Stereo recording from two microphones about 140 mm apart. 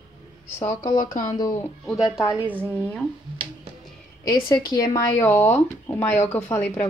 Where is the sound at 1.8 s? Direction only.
5° right (ahead or behind).